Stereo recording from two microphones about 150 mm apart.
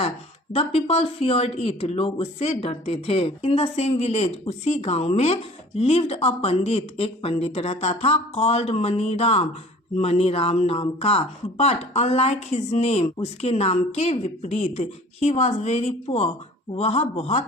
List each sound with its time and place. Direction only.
0.5 s speech: 40° left (ahead or behind)